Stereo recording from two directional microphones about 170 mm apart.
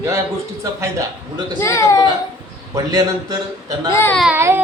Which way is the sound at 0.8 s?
20° right (ahead or behind).